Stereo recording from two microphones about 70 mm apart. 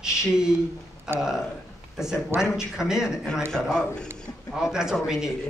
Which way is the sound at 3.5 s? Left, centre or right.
Centre.